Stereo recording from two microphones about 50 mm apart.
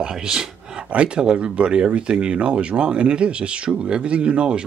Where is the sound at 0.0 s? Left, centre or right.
Centre.